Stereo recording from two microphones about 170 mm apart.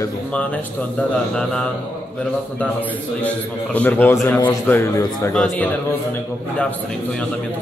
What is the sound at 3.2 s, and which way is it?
A man's voice, 10° left (ahead or behind).